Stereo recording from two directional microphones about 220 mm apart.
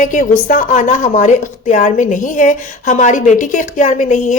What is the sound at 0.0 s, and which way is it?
Speech, 35° left (ahead or behind).